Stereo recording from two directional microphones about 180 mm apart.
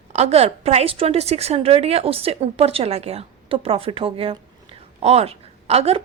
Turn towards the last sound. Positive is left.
turn(degrees=-35)  # may be behind; listen again after turning